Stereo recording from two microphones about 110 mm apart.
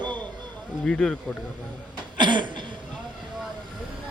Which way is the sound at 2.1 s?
45° right (ahead or behind).